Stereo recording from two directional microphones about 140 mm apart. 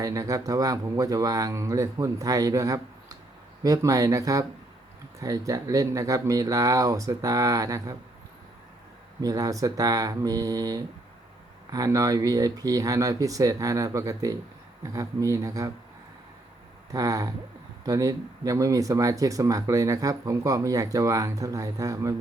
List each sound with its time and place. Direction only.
0.0 s speech: 25° right (ahead or behind)
9.2 s speech: 25° right (ahead or behind)
16.9 s speech: 25° right (ahead or behind)